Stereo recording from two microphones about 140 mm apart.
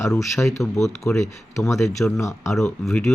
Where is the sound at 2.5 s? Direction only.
Centre (ahead or behind).